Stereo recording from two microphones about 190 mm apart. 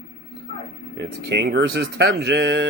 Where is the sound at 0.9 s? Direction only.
65° right (ahead or behind).